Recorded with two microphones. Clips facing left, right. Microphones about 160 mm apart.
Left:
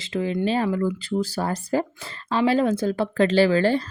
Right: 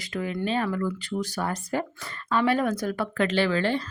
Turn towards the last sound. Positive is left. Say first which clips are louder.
# left 6 dB
turn(degrees=40)  # may be behind; listen again after turning